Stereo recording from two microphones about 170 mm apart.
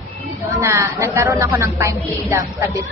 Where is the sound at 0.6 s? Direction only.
15° right (ahead or behind).